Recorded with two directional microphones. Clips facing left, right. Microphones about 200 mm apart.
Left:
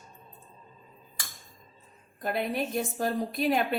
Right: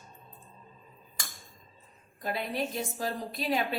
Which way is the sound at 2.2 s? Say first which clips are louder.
Left 3 dB; 50° left (ahead or behind).